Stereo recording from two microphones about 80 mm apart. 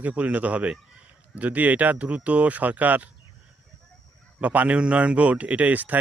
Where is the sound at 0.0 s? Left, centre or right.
Centre.